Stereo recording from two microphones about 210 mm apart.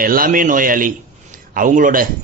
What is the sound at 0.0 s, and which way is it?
Speech, 45° right (ahead or behind).